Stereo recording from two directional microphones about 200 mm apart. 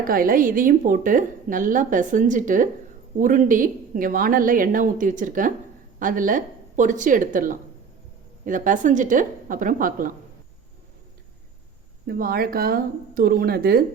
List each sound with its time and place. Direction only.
0.0 s a woman's voice: 45° right (ahead or behind)
12.0 s a woman's voice: 50° right (ahead or behind)